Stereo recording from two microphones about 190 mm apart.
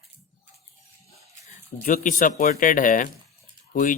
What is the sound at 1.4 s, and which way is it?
Speech, 45° left (ahead or behind).